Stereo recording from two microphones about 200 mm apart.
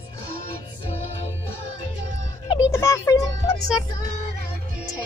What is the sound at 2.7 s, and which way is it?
Music, 15° left (ahead or behind).